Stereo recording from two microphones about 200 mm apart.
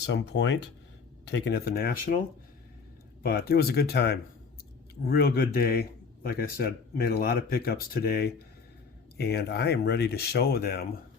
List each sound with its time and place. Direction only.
0.1 s a man's voice: 60° left (ahead or behind); by 2.2 s 45° left (ahead or behind)
3.2 s a man's voice: 50° left (ahead or behind)